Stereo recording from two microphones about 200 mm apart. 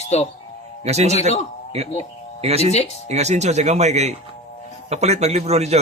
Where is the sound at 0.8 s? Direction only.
35° right (ahead or behind).